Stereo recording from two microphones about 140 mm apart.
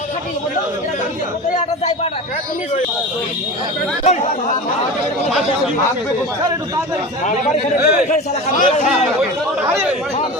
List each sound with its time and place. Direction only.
4.0 s speech: 55° left (ahead or behind)
7.8 s a man's voice: 75° left (ahead or behind)